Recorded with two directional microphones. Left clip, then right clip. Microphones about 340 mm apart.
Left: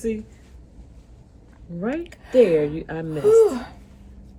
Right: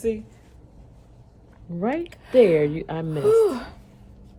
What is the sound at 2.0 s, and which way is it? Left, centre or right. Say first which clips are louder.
Speech: even; centre.